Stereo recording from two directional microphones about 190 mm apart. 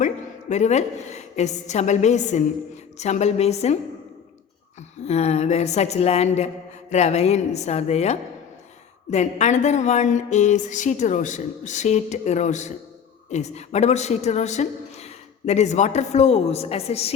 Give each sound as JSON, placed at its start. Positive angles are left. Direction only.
{"t": 0.0, "sound": "a woman's voice", "side_deg": 40}
{"t": 5.0, "sound": "a woman's voice", "side_deg": 35}